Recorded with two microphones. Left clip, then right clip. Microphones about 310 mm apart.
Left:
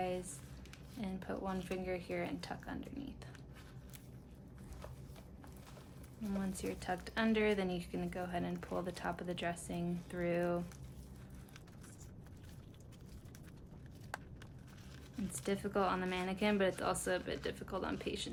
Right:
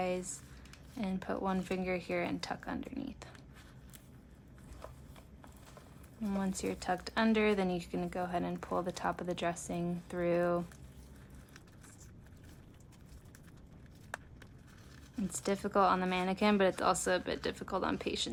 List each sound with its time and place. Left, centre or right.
0.0 s squish: centre
1.0 s speech: centre
6.6 s speech: centre
15.1 s speech: centre